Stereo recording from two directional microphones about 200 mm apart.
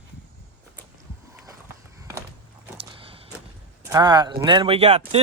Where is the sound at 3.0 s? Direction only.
25° right (ahead or behind).